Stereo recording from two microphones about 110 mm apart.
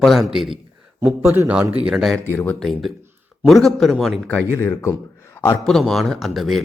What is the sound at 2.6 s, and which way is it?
Speech, centre (ahead or behind).